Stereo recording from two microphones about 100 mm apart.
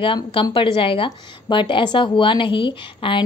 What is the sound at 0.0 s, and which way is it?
A woman's voice, 60° left (ahead or behind).